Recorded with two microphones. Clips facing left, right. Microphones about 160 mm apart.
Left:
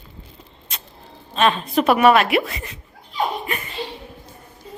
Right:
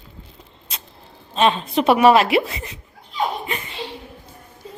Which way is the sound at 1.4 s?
25° right (ahead or behind).